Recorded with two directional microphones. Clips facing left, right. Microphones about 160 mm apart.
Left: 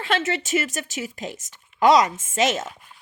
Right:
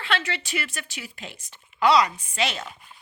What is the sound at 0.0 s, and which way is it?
Speech, 45° left (ahead or behind).